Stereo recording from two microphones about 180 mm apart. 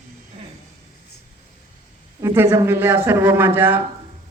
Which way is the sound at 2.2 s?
15° right (ahead or behind).